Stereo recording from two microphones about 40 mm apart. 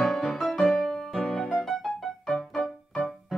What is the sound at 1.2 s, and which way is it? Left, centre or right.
Music, left.